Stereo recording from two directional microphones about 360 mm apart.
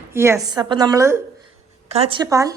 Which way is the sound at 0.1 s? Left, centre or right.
Centre.